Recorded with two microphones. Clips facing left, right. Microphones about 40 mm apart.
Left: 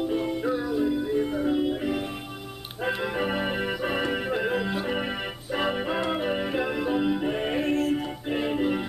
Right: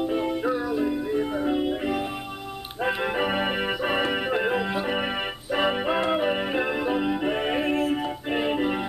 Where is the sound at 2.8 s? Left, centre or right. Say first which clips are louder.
Right 2 dB; right.